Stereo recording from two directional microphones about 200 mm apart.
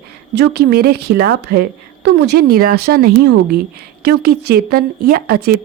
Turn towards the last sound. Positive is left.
turn(degrees=-50)  # may be behind; listen again after turning